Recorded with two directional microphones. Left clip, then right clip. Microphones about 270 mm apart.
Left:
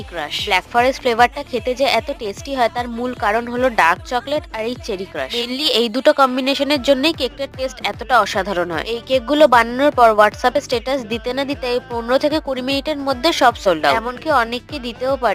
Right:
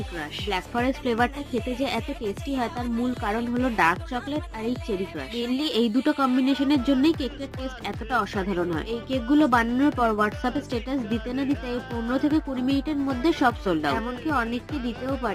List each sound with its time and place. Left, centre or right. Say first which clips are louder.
0.2 s a woman's voice: left 11 dB; left